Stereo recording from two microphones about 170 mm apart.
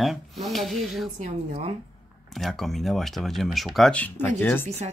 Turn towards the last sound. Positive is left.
turn(degrees=10)  # may be behind; listen again after turning